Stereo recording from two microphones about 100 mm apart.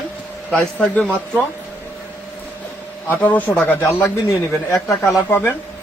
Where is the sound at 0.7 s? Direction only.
10° left (ahead or behind).